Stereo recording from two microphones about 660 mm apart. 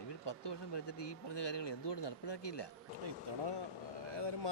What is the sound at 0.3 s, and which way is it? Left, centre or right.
Speech, left.